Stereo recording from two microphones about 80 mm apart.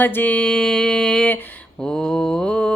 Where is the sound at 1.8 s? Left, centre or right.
Centre.